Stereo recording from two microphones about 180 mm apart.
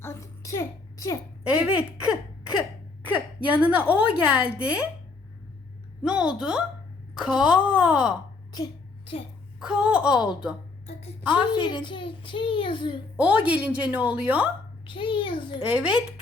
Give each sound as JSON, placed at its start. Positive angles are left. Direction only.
{"t": 0.0, "sound": "a sound", "side_deg": 15}
{"t": 1.5, "sound": "a woman's voice", "side_deg": -5}
{"t": 6.0, "sound": "a woman's voice", "side_deg": -5}
{"t": 8.5, "sound": "a sound", "side_deg": 25}
{"t": 9.6, "sound": "speech", "side_deg": -5}
{"t": 11.5, "sound": "a child's voice", "side_deg": 25}
{"t": 13.1, "sound": "a woman's voice", "side_deg": -5}
{"t": 14.8, "sound": "a child's voice", "side_deg": 25}
{"t": 15.7, "sound": "speech", "side_deg": -5}